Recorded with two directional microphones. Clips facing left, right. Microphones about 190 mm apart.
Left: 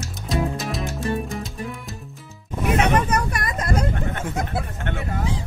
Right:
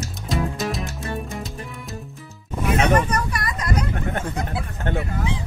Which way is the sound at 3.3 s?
50° left (ahead or behind).